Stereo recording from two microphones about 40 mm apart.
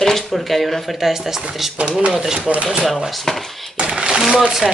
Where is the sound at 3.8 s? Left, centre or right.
Centre.